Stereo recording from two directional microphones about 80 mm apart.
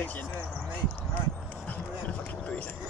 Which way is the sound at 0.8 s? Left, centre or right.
Left.